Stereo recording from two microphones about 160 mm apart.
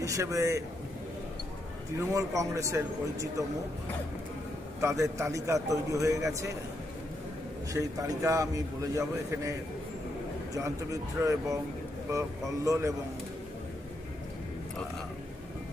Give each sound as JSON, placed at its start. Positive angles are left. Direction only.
{"t": 0.0, "sound": "a man's voice", "side_deg": -20}
{"t": 2.0, "sound": "a man's voice", "side_deg": -20}
{"t": 4.7, "sound": "a man's voice", "side_deg": -20}
{"t": 7.7, "sound": "a man's voice", "side_deg": -20}